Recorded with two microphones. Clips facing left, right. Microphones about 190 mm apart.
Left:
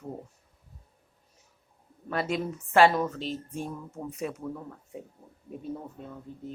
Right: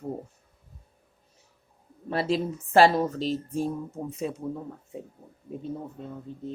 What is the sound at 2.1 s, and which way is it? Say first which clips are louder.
A woman's voice: right 3 dB; 30° right (ahead or behind).